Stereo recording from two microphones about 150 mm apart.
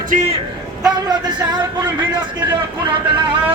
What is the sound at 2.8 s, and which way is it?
Speech, 35° right (ahead or behind).